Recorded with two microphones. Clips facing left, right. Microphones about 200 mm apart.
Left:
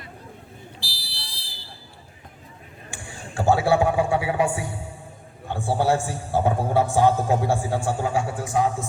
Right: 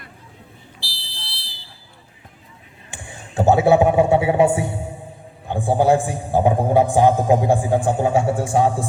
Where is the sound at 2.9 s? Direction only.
20° right (ahead or behind).